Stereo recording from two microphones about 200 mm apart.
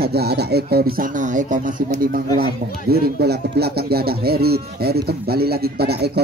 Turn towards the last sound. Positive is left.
turn(degrees=-55)  # may be behind; listen again after turning